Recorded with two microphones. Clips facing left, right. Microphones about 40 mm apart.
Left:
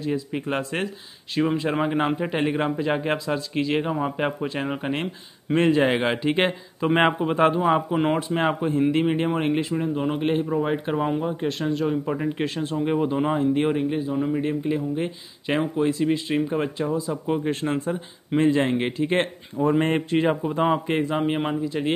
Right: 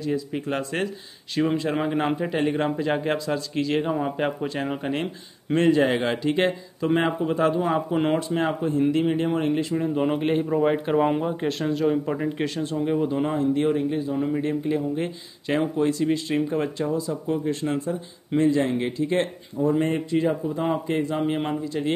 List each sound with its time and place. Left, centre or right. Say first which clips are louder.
0.0 s a man's voice: even; centre
5.7 s speech: right 1 dB; left
7.9 s a man's voice: even; centre
8.4 s speech: left 1 dB; left
9.8 s speech: right 2 dB; centre
10.1 s a man's voice: even; centre
12.8 s speech: left 1 dB; left
14.1 s a man's voice: even; centre
17.3 s a man's voice: left 1 dB; left
19.6 s a man's voice: left 1 dB; left
21.4 s speech: left 1 dB; centre